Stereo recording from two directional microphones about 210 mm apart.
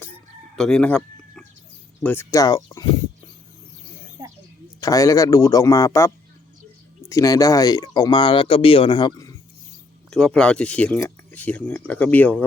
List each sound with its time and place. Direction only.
0.5 s chicken: 5° left (ahead or behind)
2.0 s speech: 15° left (ahead or behind)
4.2 s a sound: 20° right (ahead or behind)
4.8 s speech: 15° left (ahead or behind)
7.1 s speech: 15° left (ahead or behind)
10.1 s speech: 5° left (ahead or behind)